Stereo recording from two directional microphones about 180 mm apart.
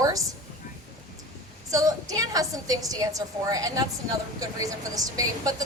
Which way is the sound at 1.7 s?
20° right (ahead or behind).